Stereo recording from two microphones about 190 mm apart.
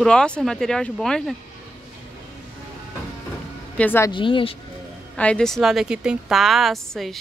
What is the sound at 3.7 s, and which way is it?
Speech, 10° left (ahead or behind).